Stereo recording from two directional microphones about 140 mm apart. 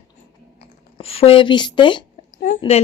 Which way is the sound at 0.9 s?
45° left (ahead or behind).